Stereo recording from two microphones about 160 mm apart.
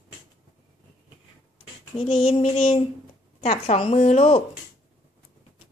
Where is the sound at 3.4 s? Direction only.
40° left (ahead or behind).